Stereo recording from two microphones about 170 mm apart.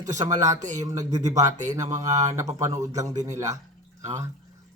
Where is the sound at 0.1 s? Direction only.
45° right (ahead or behind).